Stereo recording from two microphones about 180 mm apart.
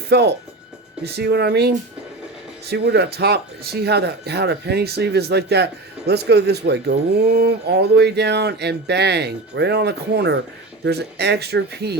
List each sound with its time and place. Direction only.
0.1 s speech: 70° right (ahead or behind)